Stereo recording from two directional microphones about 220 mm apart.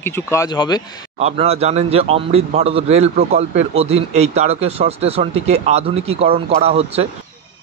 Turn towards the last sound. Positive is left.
turn(degrees=-25)  # may be behind; listen again after turning